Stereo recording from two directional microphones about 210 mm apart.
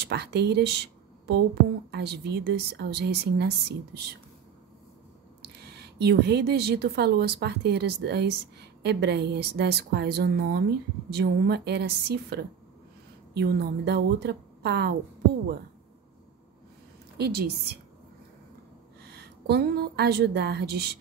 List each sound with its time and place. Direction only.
0.0 s speech: 50° right (ahead or behind)
5.4 s speech: 50° right (ahead or behind)
17.2 s speech: 50° right (ahead or behind)
19.0 s a woman's voice: 50° right (ahead or behind)